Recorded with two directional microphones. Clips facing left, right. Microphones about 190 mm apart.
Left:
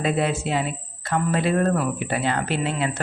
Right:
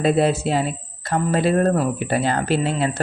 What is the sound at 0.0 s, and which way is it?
Speech, 35° right (ahead or behind).